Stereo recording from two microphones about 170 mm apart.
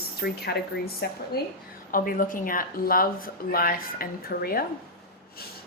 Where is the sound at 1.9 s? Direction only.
55° left (ahead or behind).